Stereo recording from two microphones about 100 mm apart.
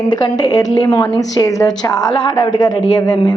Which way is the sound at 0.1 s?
45° left (ahead or behind).